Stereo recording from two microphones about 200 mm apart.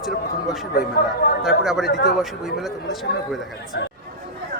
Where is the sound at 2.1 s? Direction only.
Centre (ahead or behind).